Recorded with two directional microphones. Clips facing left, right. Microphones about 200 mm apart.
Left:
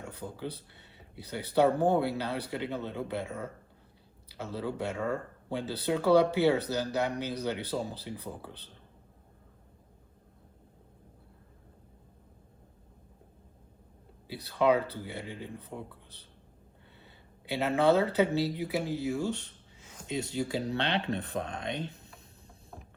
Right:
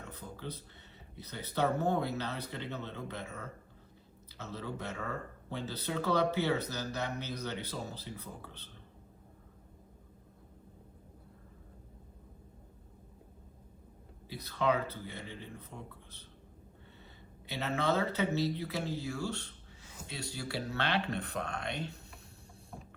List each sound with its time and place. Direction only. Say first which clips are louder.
0.0 s speech: left 6 dB; 10° left (ahead or behind)
14.3 s speech: left 6 dB; 15° left (ahead or behind)